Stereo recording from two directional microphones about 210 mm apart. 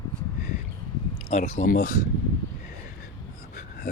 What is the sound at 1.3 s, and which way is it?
Speech, 30° left (ahead or behind).